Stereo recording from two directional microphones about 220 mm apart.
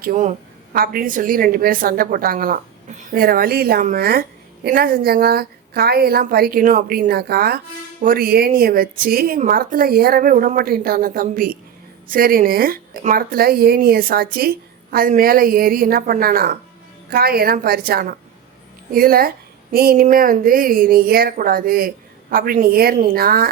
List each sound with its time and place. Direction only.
0.0 s a woman's voice: 35° right (ahead or behind)